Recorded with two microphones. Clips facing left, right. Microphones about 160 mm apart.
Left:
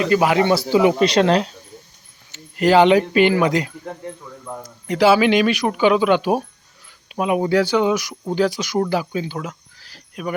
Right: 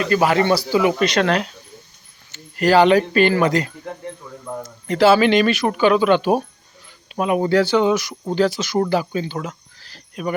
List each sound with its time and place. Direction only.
0.0 s speech: 15° left (ahead or behind)
0.6 s speech: 25° left (ahead or behind); by 10.3 s 5° left (ahead or behind)